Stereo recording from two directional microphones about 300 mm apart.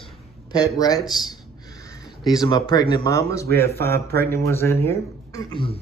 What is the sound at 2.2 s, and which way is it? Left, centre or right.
Speech, centre.